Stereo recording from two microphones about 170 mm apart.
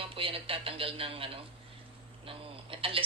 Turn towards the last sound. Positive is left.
turn(degrees=-30)  # may be behind; listen again after turning